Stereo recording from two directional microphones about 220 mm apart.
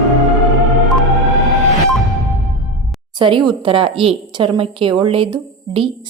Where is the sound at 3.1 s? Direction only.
20° right (ahead or behind).